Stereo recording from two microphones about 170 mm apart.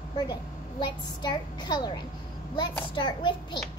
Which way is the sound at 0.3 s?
25° left (ahead or behind).